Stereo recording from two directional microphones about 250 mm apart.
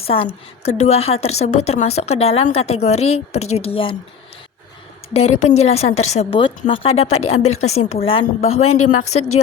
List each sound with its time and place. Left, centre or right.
0.0 s a woman's voice: left
5.1 s a woman's voice: left